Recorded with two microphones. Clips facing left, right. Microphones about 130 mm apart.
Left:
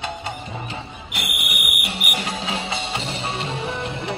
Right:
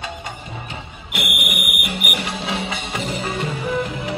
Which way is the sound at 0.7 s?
35° left (ahead or behind).